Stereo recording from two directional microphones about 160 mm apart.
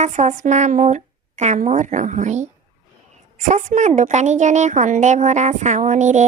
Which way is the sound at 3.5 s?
50° right (ahead or behind).